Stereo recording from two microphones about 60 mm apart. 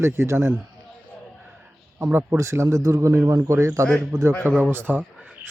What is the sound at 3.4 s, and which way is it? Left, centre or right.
Speech, right.